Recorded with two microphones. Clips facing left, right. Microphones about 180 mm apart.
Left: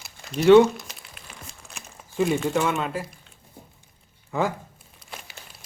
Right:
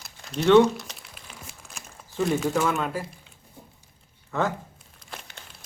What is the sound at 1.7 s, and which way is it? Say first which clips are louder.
Speech: left 4 dB; 5° left (ahead or behind).